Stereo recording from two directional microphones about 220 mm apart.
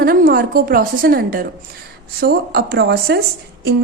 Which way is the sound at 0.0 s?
40° right (ahead or behind).